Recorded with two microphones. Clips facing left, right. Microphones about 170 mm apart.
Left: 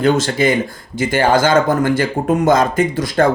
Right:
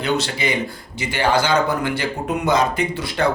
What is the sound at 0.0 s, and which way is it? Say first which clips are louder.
A man's voice: left 7 dB; 45° left (ahead or behind).